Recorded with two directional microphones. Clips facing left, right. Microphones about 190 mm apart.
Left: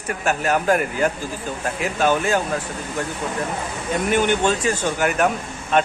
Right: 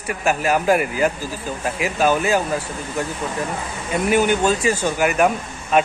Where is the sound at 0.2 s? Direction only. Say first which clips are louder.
Right 2 dB; 10° right (ahead or behind).